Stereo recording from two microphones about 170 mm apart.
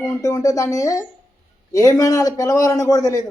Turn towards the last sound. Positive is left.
turn(degrees=20)  # may be behind; listen again after turning